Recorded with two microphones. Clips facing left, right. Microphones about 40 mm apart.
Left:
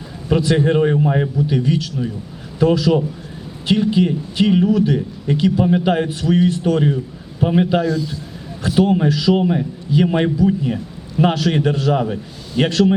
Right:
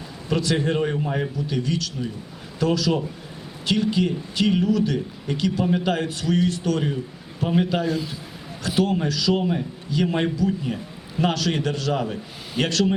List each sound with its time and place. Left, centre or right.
0.3 s a man's voice: centre
7.9 s a man's voice: right
8.8 s a man's voice: left
12.6 s a man's voice: centre